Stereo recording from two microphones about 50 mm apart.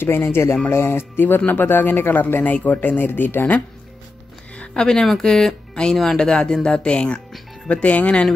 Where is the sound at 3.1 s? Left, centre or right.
Left.